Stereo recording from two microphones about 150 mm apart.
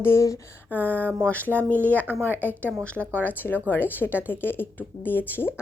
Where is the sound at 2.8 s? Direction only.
10° left (ahead or behind).